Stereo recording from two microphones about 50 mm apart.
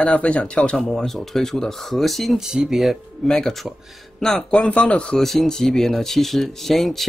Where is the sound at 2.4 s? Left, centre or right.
Centre.